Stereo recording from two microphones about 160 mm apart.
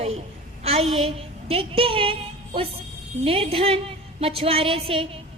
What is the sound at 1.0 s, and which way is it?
A woman's voice, 35° right (ahead or behind).